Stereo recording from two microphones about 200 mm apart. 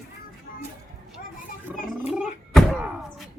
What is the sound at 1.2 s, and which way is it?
Children playing, 45° left (ahead or behind).